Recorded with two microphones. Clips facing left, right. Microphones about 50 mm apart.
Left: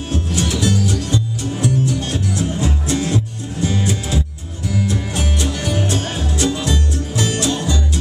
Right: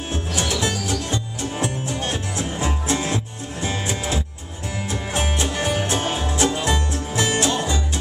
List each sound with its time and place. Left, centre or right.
0.1 s music: right